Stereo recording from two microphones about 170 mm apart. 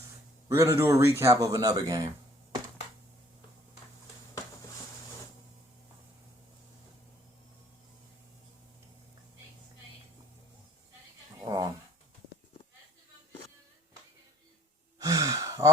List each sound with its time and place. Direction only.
0.4 s speech: 15° right (ahead or behind)
11.3 s a sound: 20° right (ahead or behind)
14.9 s gasp: 20° right (ahead or behind)